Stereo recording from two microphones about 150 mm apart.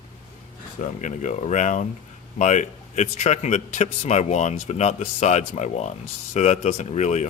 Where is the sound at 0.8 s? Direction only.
55° left (ahead or behind).